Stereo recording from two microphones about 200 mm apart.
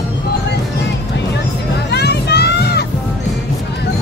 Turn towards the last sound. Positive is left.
turn(degrees=55)  # may be behind; listen again after turning